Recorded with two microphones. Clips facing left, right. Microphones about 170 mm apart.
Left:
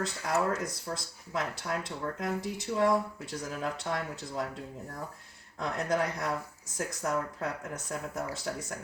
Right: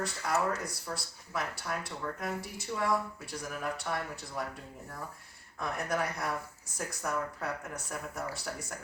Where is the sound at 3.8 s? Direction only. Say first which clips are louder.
Left 2 dB; 20° left (ahead or behind).